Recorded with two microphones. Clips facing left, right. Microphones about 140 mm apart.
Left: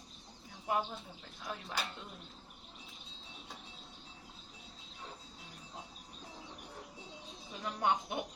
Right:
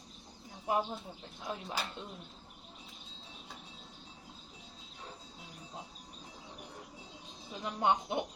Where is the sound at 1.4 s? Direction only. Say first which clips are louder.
Right 3 dB; 25° right (ahead or behind).